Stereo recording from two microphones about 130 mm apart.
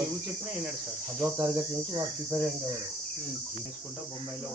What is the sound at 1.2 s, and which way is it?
Cricket, 20° right (ahead or behind).